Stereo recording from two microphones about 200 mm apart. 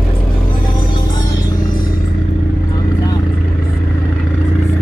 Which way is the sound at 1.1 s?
45° left (ahead or behind).